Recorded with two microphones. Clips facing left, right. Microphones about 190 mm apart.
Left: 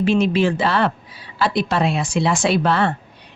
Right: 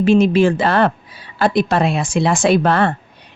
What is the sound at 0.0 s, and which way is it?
A woman's voice, 45° right (ahead or behind).